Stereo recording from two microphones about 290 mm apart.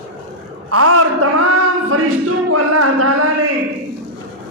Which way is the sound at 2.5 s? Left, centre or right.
Right.